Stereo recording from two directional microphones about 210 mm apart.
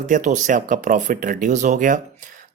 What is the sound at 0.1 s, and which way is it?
Speech, 35° right (ahead or behind).